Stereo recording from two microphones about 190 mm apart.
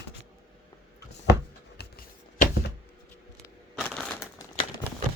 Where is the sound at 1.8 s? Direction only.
55° left (ahead or behind).